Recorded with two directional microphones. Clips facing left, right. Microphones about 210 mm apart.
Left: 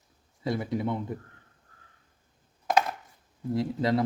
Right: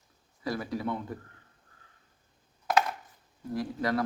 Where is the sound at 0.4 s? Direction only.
20° left (ahead or behind).